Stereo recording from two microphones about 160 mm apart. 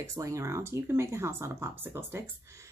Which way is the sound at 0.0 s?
20° right (ahead or behind).